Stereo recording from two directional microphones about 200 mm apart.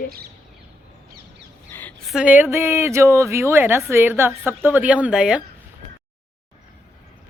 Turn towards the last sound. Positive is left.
turn(degrees=-5)  # may be behind; listen again after turning